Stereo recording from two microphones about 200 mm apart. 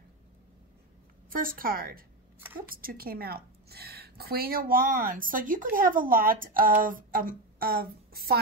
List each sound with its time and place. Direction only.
1.3 s a woman's voice: 45° right (ahead or behind)